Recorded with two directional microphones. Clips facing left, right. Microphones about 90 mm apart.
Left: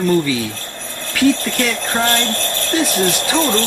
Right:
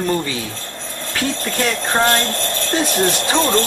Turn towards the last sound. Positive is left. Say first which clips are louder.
# even
turn(degrees=-25)  # may be behind; listen again after turning